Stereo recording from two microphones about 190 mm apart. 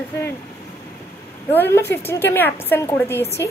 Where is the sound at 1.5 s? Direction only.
10° left (ahead or behind).